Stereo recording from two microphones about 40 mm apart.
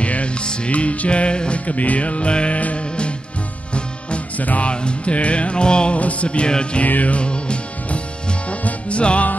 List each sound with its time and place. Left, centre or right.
0.0 s music: left
4.4 s music: left
4.6 s music: left
5.9 s music: left
6.9 s music: left